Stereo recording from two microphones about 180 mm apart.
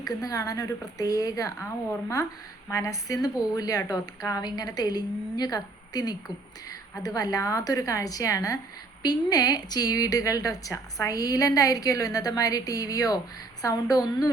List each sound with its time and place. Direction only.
0.1 s a woman's voice: 20° left (ahead or behind)